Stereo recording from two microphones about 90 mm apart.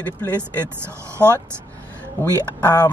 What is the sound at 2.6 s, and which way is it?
Speech, 45° left (ahead or behind).